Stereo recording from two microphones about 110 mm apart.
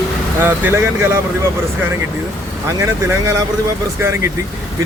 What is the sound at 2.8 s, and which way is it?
Speech, 25° right (ahead or behind).